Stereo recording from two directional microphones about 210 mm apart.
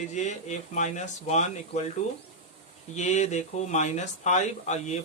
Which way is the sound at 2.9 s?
35° left (ahead or behind).